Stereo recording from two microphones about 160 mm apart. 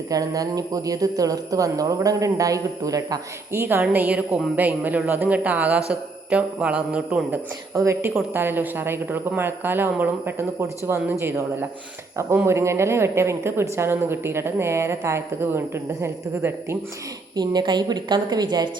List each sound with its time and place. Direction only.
0.1 s a woman's voice: 20° right (ahead or behind)